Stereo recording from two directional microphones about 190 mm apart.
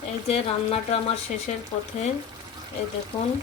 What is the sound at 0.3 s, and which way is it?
Speech, 30° left (ahead or behind).